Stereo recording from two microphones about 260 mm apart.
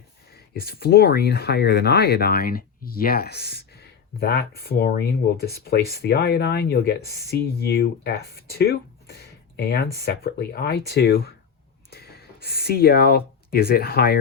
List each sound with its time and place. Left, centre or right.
0.6 s speech: left